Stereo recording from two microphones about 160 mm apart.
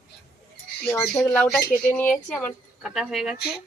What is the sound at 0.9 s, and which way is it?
Speech, 15° left (ahead or behind).